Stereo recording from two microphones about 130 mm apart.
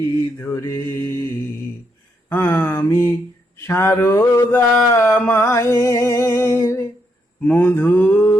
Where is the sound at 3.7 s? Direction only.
20° left (ahead or behind).